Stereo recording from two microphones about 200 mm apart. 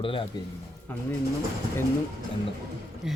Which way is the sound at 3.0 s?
Centre (ahead or behind).